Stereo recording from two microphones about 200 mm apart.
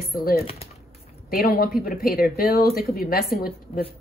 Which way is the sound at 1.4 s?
50° left (ahead or behind).